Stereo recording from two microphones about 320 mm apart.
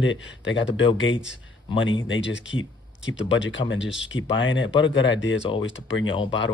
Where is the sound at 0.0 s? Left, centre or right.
Left.